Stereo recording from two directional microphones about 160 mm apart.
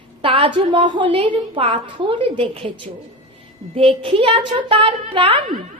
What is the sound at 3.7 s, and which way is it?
A woman's voice, 35° right (ahead or behind).